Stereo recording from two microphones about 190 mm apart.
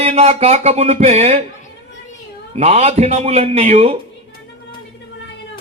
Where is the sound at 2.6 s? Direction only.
35° right (ahead or behind).